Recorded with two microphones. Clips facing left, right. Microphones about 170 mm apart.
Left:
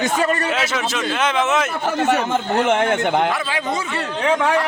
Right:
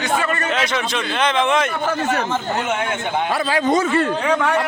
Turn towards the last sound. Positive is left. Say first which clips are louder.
# right 7 dB
turn(degrees=-45)  # may be behind; listen again after turning